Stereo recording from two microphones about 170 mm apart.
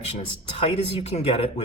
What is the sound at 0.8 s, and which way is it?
Speech, 35° left (ahead or behind).